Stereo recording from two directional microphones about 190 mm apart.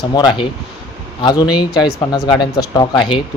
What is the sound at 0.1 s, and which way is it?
Speech, 25° left (ahead or behind).